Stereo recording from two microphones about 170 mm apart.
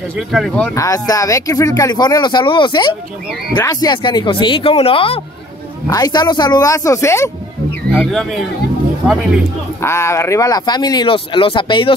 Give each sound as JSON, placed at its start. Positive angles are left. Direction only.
{"t": 0.3, "sound": "speech", "side_deg": 0}
{"t": 0.7, "sound": "speech", "side_deg": 20}
{"t": 5.9, "sound": "speech", "side_deg": 25}
{"t": 7.9, "sound": "speech", "side_deg": 0}
{"t": 9.8, "sound": "speech", "side_deg": 15}